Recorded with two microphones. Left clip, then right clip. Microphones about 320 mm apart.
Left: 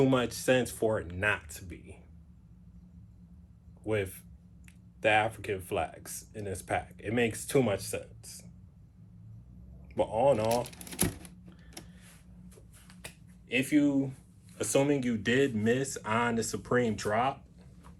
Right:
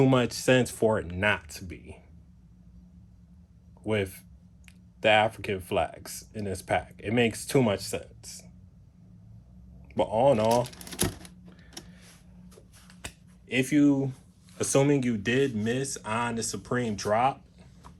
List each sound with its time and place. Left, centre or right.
0.0 s speech: right
3.8 s speech: right
10.0 s speech: right
13.5 s speech: right